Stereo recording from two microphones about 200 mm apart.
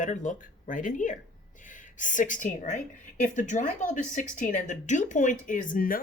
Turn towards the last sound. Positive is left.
turn(degrees=45)  # may be behind; listen again after turning